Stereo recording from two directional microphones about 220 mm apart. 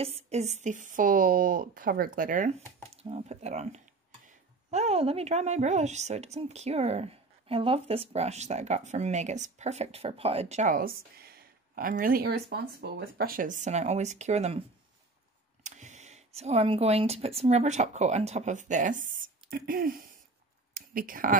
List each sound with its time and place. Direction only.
0.0 s a woman's voice: 30° right (ahead or behind)
15.6 s speech: 35° right (ahead or behind)